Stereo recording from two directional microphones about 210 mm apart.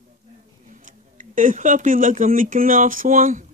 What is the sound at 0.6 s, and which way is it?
Speech, 40° right (ahead or behind).